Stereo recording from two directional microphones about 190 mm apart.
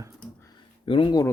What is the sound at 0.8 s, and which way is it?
Speech, 25° left (ahead or behind).